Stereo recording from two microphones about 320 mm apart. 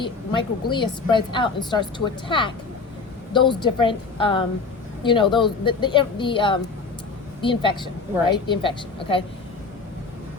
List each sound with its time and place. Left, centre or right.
0.0 s a woman's voice: centre